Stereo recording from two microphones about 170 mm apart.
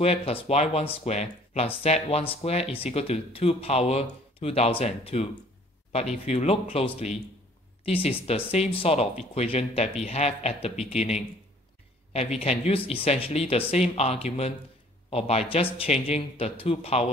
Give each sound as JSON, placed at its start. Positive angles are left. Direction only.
{"t": 0.0, "sound": "speech", "side_deg": 35}